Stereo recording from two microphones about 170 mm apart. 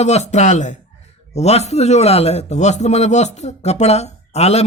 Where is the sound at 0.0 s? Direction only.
40° left (ahead or behind).